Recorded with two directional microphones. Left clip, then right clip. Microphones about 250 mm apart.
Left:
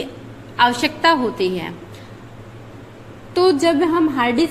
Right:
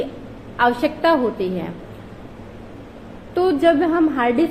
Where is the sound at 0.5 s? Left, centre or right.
Left.